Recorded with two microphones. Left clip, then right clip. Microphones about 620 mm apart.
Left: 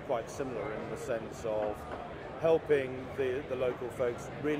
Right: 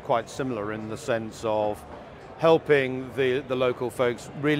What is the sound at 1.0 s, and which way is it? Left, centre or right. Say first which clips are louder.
A man's voice: right 10 dB; right.